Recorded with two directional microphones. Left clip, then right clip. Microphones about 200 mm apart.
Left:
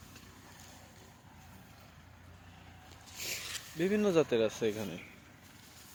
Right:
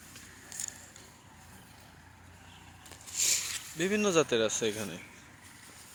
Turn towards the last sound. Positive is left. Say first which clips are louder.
# right 2 dB
turn(degrees=5)  # may be behind; listen again after turning